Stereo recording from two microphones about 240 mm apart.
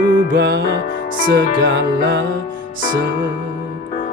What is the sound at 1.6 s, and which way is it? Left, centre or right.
Music, right.